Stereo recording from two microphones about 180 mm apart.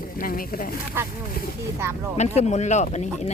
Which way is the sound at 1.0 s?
10° right (ahead or behind).